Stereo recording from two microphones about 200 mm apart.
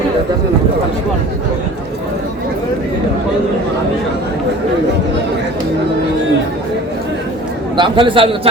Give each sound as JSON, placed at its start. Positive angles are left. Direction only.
{"t": 7.8, "sound": "a man's voice", "side_deg": -25}